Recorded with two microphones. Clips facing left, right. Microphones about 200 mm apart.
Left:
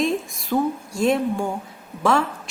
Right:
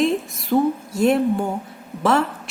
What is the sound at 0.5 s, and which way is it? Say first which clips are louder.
Speech: right 3 dB; 20° right (ahead or behind).